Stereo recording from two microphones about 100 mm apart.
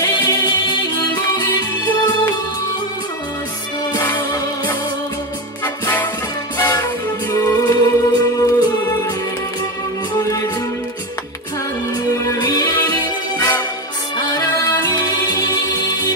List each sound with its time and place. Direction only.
0.0 s music: 35° left (ahead or behind)
6.6 s music: 40° left (ahead or behind)
10.1 s music: 35° left (ahead or behind)
12.4 s music: 45° left (ahead or behind)